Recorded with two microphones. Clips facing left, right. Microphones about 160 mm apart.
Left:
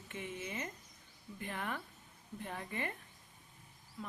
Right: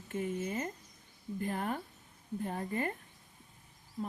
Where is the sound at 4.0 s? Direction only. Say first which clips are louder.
Right 8 dB; 40° right (ahead or behind).